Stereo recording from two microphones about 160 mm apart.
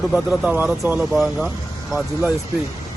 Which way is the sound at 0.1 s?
5° right (ahead or behind).